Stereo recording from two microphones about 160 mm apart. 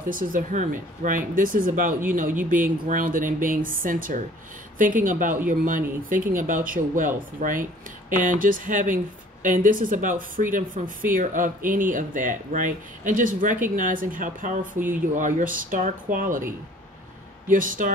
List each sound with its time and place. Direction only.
0.0 s speech: 60° right (ahead or behind)
17.5 s speech: 55° right (ahead or behind)